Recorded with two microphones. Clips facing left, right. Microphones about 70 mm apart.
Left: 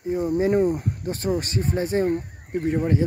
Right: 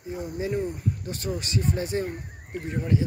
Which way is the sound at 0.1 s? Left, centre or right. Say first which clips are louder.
Left 9 dB; left.